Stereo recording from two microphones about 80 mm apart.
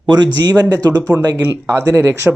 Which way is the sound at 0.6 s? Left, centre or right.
Right.